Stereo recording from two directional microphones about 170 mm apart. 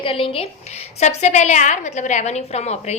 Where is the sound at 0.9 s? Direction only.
40° left (ahead or behind).